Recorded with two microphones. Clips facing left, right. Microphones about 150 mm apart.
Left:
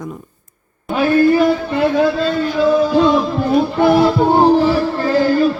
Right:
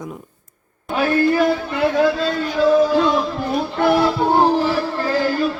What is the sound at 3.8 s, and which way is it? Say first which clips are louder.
Music: left 3 dB; 20° left (ahead or behind).